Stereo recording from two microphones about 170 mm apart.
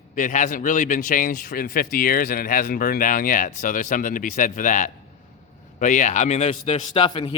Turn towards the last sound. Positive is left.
turn(degrees=30)  # may be behind; listen again after turning